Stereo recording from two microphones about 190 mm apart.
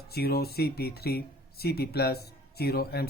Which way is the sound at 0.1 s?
55° left (ahead or behind).